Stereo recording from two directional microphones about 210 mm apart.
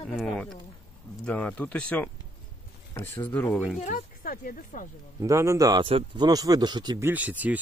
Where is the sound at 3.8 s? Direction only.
40° left (ahead or behind).